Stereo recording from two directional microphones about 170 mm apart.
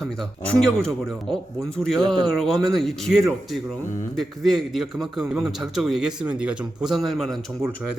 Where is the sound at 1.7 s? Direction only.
5° left (ahead or behind).